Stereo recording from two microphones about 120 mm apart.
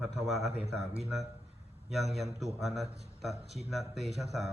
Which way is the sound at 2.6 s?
Centre (ahead or behind).